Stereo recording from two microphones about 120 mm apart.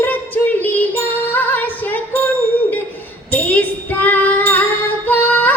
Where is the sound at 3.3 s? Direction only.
15° left (ahead or behind).